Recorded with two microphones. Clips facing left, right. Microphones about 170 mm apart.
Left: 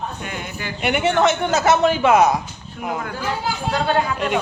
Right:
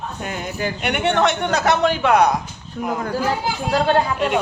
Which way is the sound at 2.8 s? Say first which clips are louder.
Right 3 dB; 35° right (ahead or behind).